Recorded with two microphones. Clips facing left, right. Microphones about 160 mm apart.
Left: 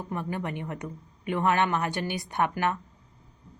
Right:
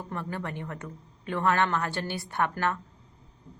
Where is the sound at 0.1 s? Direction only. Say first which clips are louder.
Left 3 dB; 15° left (ahead or behind).